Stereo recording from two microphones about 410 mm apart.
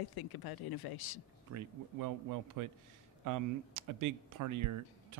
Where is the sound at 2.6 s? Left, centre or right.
Right.